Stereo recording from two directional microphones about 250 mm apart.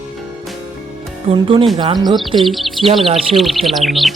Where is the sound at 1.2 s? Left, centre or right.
Right.